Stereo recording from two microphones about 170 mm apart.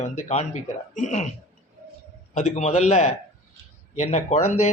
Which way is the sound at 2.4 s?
40° left (ahead or behind).